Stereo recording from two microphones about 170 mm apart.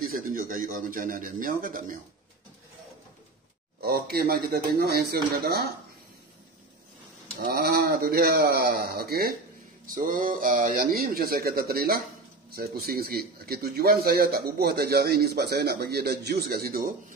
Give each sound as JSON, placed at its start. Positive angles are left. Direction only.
{"t": 0.0, "sound": "a man's voice", "side_deg": -55}
{"t": 3.8, "sound": "a man's voice", "side_deg": -65}
{"t": 7.4, "sound": "a man's voice", "side_deg": -65}
{"t": 9.8, "sound": "a man's voice", "side_deg": -55}